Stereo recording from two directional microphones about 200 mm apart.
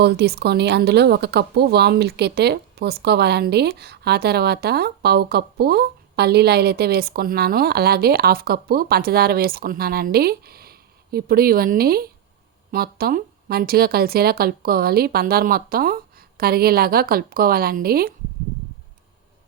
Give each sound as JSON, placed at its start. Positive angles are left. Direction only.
{"t": 0.0, "sound": "speech", "side_deg": -55}